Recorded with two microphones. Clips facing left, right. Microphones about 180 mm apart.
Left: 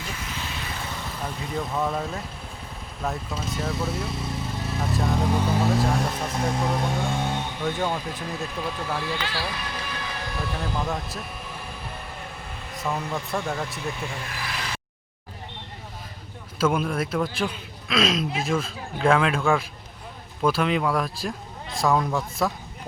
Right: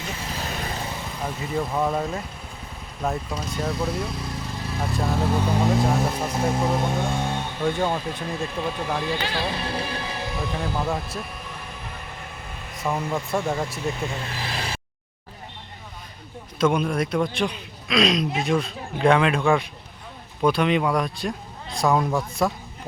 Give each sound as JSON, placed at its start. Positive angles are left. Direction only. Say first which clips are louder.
{"t": 0.3, "sound": "vehicle", "louder": "right 4 dB", "side_deg": -40}
{"t": 1.2, "sound": "speech", "louder": "right 4 dB", "side_deg": 0}
{"t": 5.6, "sound": "speech", "louder": "right 2 dB", "side_deg": 0}
{"t": 7.8, "sound": "speech", "louder": "right 1 dB", "side_deg": -10}
{"t": 8.0, "sound": "speech", "louder": "right 3 dB", "side_deg": 0}
{"t": 8.8, "sound": "speech", "louder": "right 3 dB", "side_deg": -15}
{"t": 12.9, "sound": "speech", "louder": "right 3 dB", "side_deg": -15}
{"t": 14.0, "sound": "speech", "louder": "right 3 dB", "side_deg": -25}
{"t": 16.6, "sound": "speech", "louder": "right 2 dB", "side_deg": 5}